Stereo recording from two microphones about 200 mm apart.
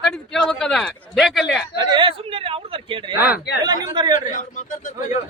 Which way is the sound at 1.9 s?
25° right (ahead or behind).